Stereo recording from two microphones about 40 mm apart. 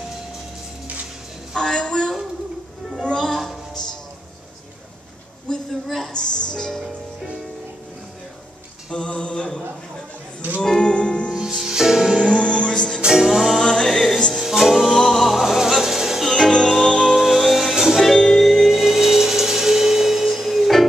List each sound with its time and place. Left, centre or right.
1.5 s a sound: centre
2.9 s music: centre
3.3 s music: centre
5.5 s a sound: centre
5.9 s a sound: centre
6.1 s music: left
8.9 s a sound: left
10.6 s music: centre
11.6 s music: centre
12.3 s music: left
13.0 s music: centre
13.6 s music: centre
14.4 s music: centre
16.3 s music: centre